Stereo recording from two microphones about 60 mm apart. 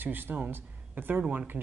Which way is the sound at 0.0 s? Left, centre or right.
Right.